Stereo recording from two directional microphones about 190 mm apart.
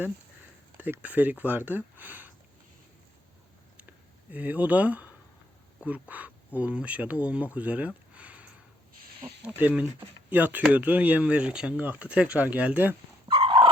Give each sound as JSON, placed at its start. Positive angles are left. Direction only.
{"t": 0.8, "sound": "speech", "side_deg": -10}
{"t": 4.3, "sound": "speech", "side_deg": -10}
{"t": 13.2, "sound": "dog", "side_deg": -25}